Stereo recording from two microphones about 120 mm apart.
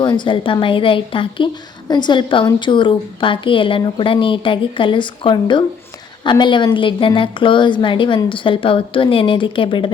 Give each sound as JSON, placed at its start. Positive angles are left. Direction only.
{"t": 0.0, "sound": "a woman's voice", "side_deg": 40}